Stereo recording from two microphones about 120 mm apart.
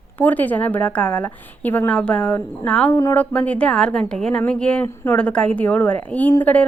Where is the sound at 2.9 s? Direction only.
20° left (ahead or behind).